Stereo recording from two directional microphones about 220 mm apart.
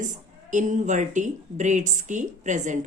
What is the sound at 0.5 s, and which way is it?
A woman's voice, 35° right (ahead or behind).